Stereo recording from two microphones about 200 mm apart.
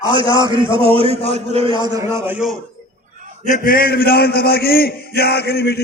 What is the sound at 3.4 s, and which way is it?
A man's voice, 45° left (ahead or behind).